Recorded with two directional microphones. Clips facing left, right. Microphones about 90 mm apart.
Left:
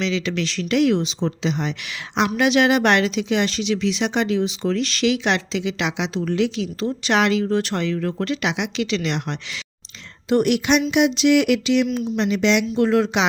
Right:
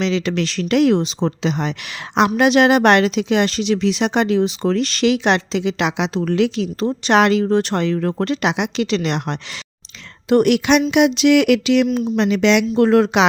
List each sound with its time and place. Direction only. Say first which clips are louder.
0.0 s speech: right 4 dB; 45° right (ahead or behind)
6.7 s speech: right 5 dB; 40° right (ahead or behind)
7.5 s speech: right 4 dB; 35° right (ahead or behind)
10.2 s a sound: right 4 dB; 70° right (ahead or behind)
11.9 s speech: right 4 dB; 40° right (ahead or behind)
12.1 s a sound: right 4 dB; 65° right (ahead or behind)
12.7 s speech: right 4 dB; 55° right (ahead or behind)